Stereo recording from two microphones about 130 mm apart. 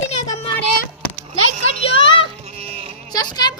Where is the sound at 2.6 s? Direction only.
50° right (ahead or behind).